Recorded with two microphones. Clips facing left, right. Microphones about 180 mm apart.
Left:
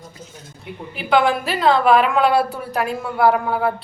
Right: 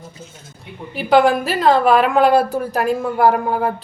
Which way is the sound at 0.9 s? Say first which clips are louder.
Right 4 dB; 40° right (ahead or behind).